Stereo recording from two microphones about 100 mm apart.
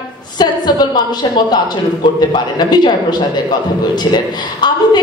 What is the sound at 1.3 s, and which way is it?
A woman's voice, 45° left (ahead or behind).